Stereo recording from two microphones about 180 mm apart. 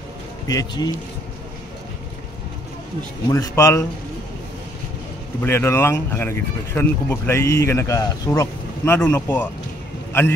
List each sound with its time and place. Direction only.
0.5 s a man's voice: 20° left (ahead or behind)
3.3 s speech: 20° left (ahead or behind)
5.4 s speech: 15° left (ahead or behind)